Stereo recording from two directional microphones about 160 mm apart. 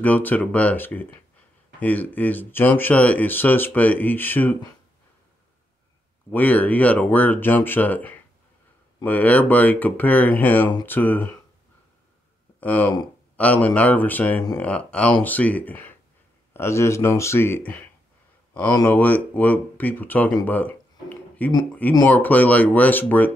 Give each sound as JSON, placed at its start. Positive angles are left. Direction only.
{"t": 0.0, "sound": "speech", "side_deg": 10}
{"t": 6.3, "sound": "speech", "side_deg": 10}
{"t": 12.5, "sound": "speech", "side_deg": 10}
{"t": 18.9, "sound": "speech", "side_deg": 10}
{"t": 20.4, "sound": "a sound", "side_deg": 10}
{"t": 22.1, "sound": "speech", "side_deg": 10}